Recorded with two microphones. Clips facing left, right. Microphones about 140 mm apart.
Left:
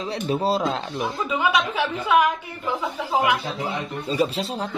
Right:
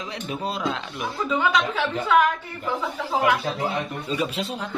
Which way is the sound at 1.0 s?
10° left (ahead or behind).